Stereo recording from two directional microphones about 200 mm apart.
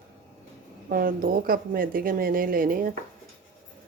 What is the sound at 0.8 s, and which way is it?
Speech, 50° right (ahead or behind).